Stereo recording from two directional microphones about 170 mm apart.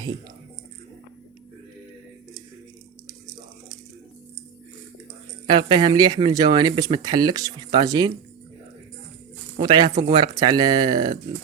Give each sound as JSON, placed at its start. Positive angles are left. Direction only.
{"t": 5.5, "sound": "speech", "side_deg": -25}
{"t": 9.6, "sound": "speech", "side_deg": -25}